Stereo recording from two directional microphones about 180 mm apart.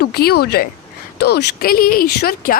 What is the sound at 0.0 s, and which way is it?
Speech, 60° left (ahead or behind).